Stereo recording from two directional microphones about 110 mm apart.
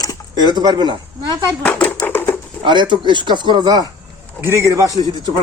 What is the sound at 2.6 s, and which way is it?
Speech, 45° right (ahead or behind).